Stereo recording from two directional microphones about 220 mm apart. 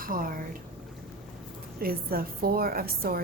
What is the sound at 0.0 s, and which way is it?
Speech, 40° right (ahead or behind).